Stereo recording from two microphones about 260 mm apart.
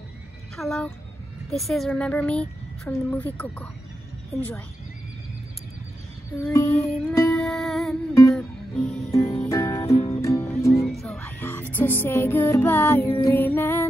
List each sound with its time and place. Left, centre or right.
0.6 s a woman's voice: centre
4.3 s a sound: centre
6.4 s a sound: centre
6.9 s music: centre
9.9 s music: left
10.2 s music: centre
10.9 s music: centre